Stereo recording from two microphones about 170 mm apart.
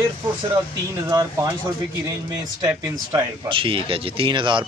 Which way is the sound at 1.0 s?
20° right (ahead or behind).